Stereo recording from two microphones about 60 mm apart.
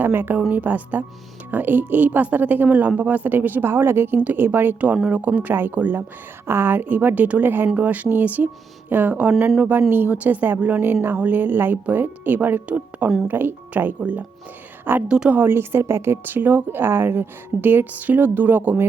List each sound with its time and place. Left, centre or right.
0.0 s a woman's voice: right
5.0 s a woman's voice: right
15.0 s a woman's voice: centre
15.4 s speech: right